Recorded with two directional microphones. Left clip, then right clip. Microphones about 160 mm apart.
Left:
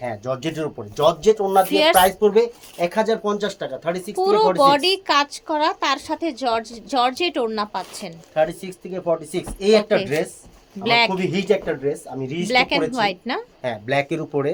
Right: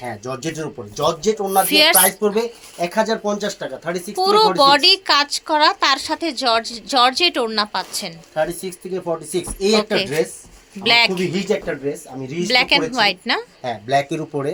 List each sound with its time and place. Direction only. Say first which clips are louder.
0.0 s a woman's voice: left 1 dB; 10° left (ahead or behind); by 4.1 s 25° left (ahead or behind)
4.1 s speech: right 3 dB; centre (ahead or behind)
8.4 s a woman's voice: left 1 dB; 20° left (ahead or behind)
12.4 s a woman's voice: right 3 dB; 5° left (ahead or behind)